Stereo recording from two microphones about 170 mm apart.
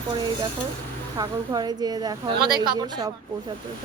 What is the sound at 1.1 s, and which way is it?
Speech, 20° right (ahead or behind).